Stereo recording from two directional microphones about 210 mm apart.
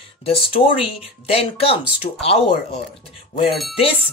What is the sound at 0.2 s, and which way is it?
Speech, 30° left (ahead or behind).